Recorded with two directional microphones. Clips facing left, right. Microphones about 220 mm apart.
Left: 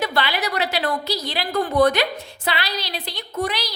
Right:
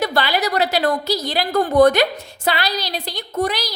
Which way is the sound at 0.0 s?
40° right (ahead or behind).